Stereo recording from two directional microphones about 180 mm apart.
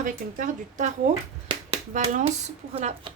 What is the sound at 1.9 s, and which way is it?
A woman's voice, 40° right (ahead or behind).